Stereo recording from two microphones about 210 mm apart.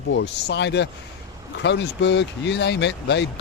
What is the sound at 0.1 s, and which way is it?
Speech, 55° left (ahead or behind).